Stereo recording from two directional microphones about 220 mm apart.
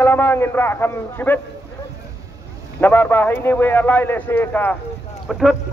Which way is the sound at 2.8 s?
10° left (ahead or behind).